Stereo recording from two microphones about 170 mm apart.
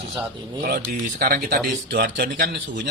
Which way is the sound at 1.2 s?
70° right (ahead or behind).